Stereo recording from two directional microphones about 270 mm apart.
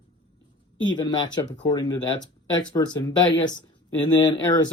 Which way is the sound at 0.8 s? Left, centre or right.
Centre.